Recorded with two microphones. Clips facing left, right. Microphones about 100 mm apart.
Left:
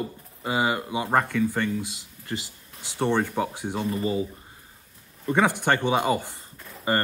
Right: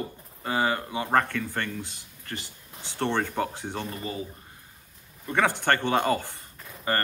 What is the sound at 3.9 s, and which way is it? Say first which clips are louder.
Speech: left 8 dB; 25° left (ahead or behind).